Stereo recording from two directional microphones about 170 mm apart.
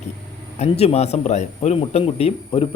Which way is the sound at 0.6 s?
40° left (ahead or behind).